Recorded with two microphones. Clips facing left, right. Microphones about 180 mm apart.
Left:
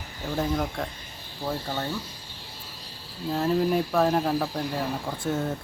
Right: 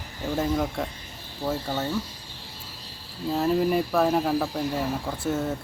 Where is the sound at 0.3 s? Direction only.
5° right (ahead or behind).